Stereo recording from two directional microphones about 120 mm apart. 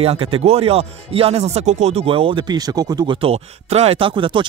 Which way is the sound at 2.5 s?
35° right (ahead or behind).